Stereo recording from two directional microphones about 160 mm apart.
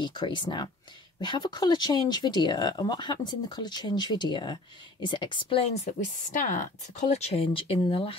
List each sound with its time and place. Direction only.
0.0 s a woman's voice: 30° left (ahead or behind)